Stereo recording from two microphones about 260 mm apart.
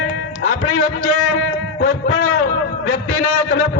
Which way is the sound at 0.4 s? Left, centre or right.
Left.